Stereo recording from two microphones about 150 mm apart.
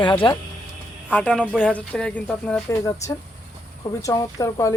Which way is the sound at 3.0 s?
20° left (ahead or behind).